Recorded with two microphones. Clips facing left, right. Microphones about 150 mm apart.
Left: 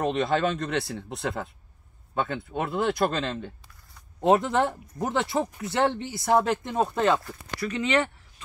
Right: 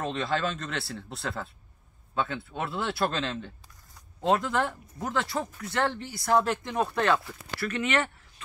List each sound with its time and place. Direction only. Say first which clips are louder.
0.0 s speech: left 5 dB; 20° left (ahead or behind)
4.2 s speech: left 4 dB; 25° left (ahead or behind)